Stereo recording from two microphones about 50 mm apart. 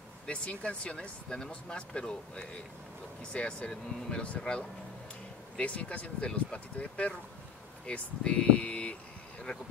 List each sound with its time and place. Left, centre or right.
0.3 s speech: left